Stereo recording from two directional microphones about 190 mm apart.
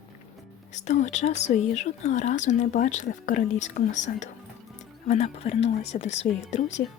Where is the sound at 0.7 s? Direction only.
40° left (ahead or behind).